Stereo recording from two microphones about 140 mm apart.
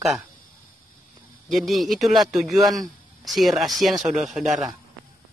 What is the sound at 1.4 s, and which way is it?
Speech, centre (ahead or behind).